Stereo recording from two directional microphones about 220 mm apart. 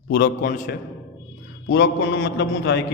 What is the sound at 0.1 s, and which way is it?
A man's voice, 45° left (ahead or behind).